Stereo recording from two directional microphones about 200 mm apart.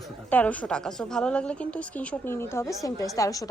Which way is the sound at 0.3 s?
5° left (ahead or behind).